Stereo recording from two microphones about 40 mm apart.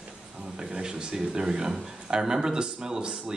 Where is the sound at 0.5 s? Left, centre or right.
Right.